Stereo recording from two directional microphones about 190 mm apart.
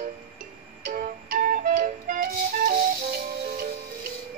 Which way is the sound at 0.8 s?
45° right (ahead or behind).